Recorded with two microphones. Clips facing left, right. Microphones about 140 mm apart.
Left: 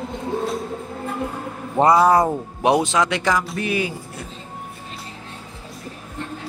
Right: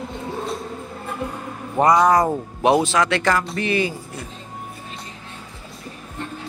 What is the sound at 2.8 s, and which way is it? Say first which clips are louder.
Speech: right 1 dB; 20° left (ahead or behind).